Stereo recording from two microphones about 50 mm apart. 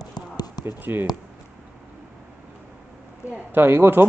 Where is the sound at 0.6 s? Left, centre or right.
Right.